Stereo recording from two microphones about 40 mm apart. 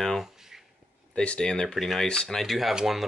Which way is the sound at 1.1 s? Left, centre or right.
Left.